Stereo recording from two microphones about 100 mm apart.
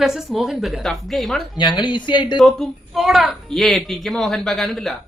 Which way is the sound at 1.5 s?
50° left (ahead or behind).